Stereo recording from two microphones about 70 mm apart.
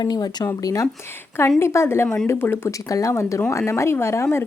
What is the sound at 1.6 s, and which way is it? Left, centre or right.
Speech, left.